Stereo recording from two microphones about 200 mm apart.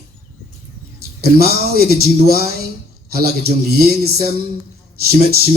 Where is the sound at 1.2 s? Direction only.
50° right (ahead or behind).